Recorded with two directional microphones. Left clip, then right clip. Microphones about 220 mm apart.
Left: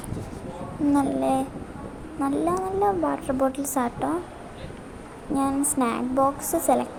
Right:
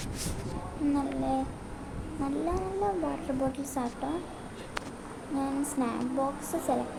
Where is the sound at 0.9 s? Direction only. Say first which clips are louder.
Left 8 dB; 25° left (ahead or behind).